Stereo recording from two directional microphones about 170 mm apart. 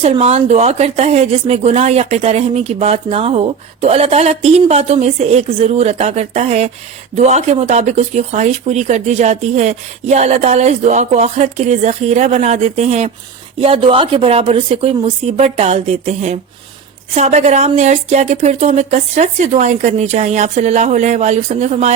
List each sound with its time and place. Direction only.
0.0 s speech: 35° right (ahead or behind)